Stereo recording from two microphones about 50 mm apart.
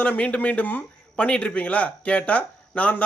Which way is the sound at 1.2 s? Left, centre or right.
Left.